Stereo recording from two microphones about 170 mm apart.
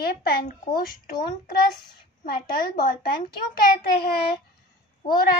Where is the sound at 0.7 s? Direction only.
25° left (ahead or behind).